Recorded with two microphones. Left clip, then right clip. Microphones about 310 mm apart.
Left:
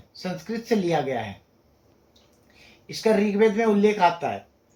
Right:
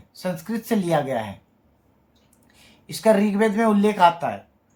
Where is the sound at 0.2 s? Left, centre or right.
Centre.